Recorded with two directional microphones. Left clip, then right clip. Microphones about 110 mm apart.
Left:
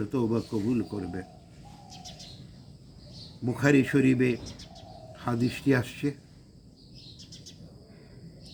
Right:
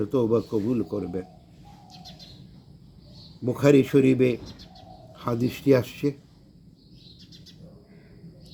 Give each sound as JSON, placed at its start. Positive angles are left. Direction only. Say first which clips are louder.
{"t": 0.1, "sound": "speech", "louder": "right 7 dB", "side_deg": -10}
{"t": 1.9, "sound": "bird", "louder": "left 1 dB", "side_deg": 35}
{"t": 3.4, "sound": "speech", "louder": "right 5 dB", "side_deg": -15}
{"t": 4.4, "sound": "bird", "louder": "even", "side_deg": 35}
{"t": 5.1, "sound": "speech", "louder": "right 3 dB", "side_deg": -10}
{"t": 7.2, "sound": "bird", "louder": "left 1 dB", "side_deg": 35}